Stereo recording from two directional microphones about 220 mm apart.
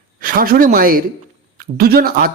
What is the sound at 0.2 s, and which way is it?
A man's voice, 40° right (ahead or behind).